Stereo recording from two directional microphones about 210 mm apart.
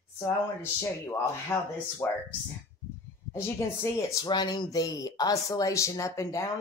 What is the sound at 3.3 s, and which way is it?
Speech, 15° left (ahead or behind).